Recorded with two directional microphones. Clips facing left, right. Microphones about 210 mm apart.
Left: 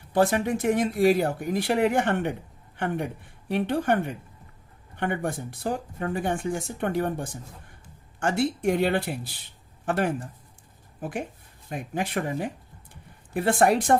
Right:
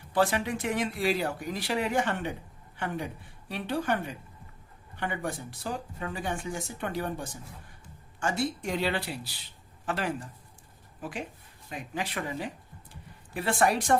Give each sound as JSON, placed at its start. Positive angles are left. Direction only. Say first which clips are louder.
{"t": 0.1, "sound": "a woman's voice", "louder": "left 5 dB", "side_deg": 50}